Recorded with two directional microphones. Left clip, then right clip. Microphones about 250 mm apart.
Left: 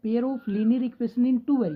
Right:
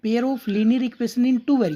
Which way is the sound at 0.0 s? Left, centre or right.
Right.